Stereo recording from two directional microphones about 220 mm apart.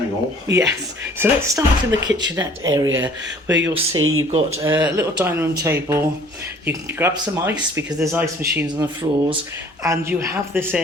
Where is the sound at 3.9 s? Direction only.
70° right (ahead or behind).